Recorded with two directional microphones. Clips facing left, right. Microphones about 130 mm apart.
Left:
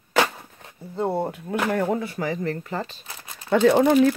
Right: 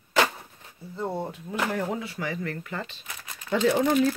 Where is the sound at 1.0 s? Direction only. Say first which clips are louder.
Left 6 dB; 60° left (ahead or behind); by 3.5 s 30° left (ahead or behind).